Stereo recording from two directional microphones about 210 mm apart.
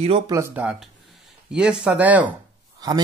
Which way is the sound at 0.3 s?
10° right (ahead or behind).